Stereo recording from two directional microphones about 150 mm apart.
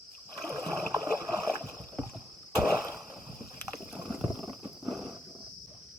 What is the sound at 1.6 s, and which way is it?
Rowboat, centre (ahead or behind).